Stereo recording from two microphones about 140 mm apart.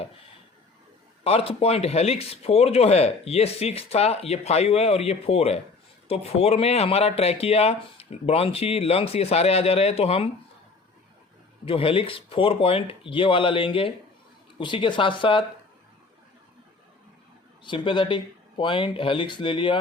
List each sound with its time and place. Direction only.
1.2 s speech: 45° left (ahead or behind)
11.6 s speech: 40° left (ahead or behind)
17.6 s speech: 35° left (ahead or behind)